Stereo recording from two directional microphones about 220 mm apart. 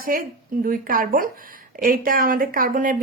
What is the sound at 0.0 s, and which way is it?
A woman's voice, 40° right (ahead or behind).